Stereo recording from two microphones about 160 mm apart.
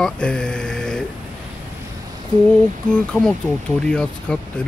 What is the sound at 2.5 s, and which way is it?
Speech, 5° left (ahead or behind).